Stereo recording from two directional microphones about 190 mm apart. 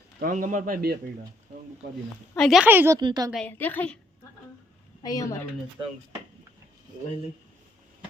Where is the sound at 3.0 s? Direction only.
20° right (ahead or behind).